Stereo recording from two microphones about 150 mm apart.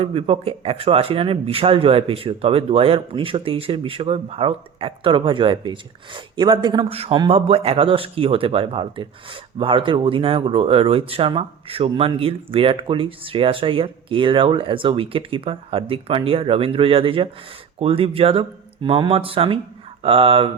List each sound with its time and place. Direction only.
0.0 s speech: 40° right (ahead or behind)
6.9 s a man's voice: 40° right (ahead or behind)